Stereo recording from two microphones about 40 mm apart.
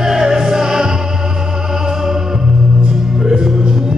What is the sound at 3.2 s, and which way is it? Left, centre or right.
Music, centre.